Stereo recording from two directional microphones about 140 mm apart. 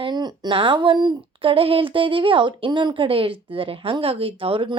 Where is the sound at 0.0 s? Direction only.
30° right (ahead or behind).